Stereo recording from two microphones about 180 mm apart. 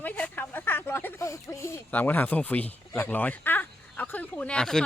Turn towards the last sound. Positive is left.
turn(degrees=5)  # may be behind; listen again after turning